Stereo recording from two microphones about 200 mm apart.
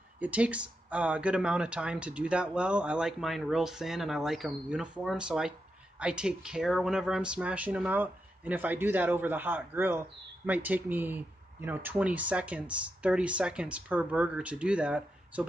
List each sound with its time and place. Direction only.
0.2 s speech: 5° right (ahead or behind)